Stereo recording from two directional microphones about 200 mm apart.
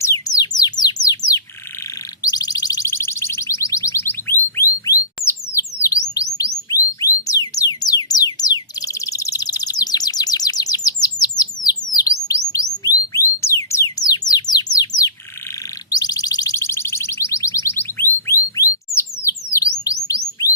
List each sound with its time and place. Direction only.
0.0 s music: 15° left (ahead or behind)
2.2 s a sound: 20° left (ahead or behind)
6.7 s music: 15° left (ahead or behind)
11.0 s bird: 20° left (ahead or behind)
13.1 s music: 15° left (ahead or behind)
13.9 s bird: 20° left (ahead or behind)
15.9 s a sound: 20° left (ahead or behind)
19.5 s bird: 15° left (ahead or behind)
20.1 s music: 15° left (ahead or behind)